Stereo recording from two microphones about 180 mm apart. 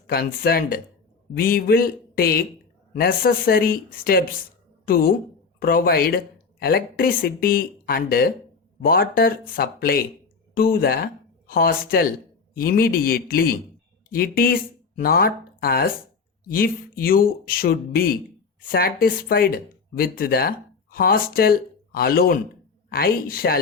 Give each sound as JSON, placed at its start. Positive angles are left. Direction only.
{"t": 0.1, "sound": "speech", "side_deg": 55}